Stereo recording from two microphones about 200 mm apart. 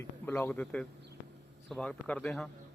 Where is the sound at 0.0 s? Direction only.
10° left (ahead or behind).